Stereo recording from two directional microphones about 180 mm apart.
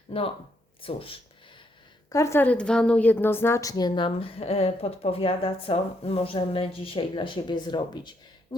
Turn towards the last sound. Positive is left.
turn(degrees=25)  # may be behind; listen again after turning